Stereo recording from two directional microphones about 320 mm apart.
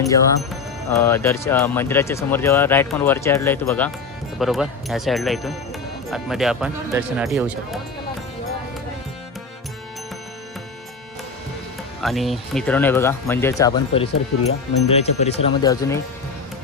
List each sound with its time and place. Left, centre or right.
0.9 s speech: centre
11.9 s speech: centre